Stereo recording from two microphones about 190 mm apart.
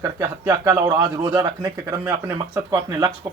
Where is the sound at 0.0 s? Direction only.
15° right (ahead or behind).